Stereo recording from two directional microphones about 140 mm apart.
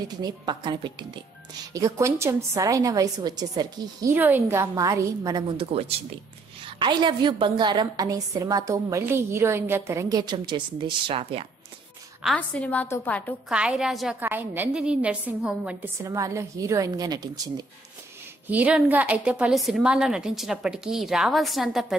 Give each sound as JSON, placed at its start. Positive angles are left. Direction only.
{"t": 0.2, "sound": "speech", "side_deg": -30}
{"t": 1.7, "sound": "a woman's voice", "side_deg": -20}
{"t": 4.1, "sound": "a woman's voice", "side_deg": -15}
{"t": 5.6, "sound": "a woman's voice", "side_deg": -45}
{"t": 12.4, "sound": "a woman's voice", "side_deg": 10}
{"t": 13.5, "sound": "a woman's voice", "side_deg": -5}
{"t": 14.2, "sound": "a woman's voice", "side_deg": -15}
{"t": 16.0, "sound": "a woman's voice", "side_deg": -25}
{"t": 18.5, "sound": "a woman's voice", "side_deg": -10}